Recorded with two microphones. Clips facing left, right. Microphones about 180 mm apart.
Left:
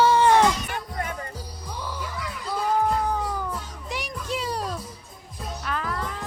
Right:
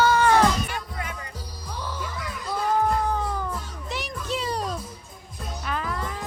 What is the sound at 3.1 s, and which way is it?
Music, 10° left (ahead or behind).